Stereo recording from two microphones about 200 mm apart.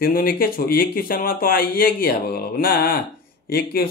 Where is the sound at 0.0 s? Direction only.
50° left (ahead or behind).